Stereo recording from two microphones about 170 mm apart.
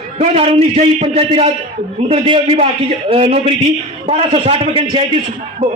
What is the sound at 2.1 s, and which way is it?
A man's voice, 30° right (ahead or behind).